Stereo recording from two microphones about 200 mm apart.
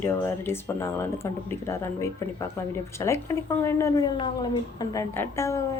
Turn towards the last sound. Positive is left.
turn(degrees=15)  # may be behind; listen again after turning